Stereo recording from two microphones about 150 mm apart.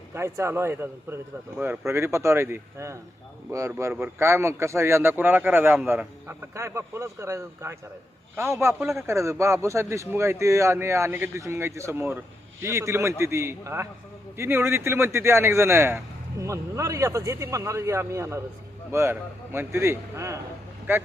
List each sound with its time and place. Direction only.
0.1 s a man's voice: 15° right (ahead or behind)